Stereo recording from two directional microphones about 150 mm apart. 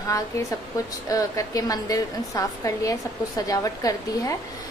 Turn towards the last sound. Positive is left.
turn(degrees=20)  # may be behind; listen again after turning